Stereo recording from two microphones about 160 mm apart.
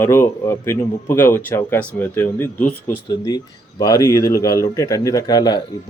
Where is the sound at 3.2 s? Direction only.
20° left (ahead or behind).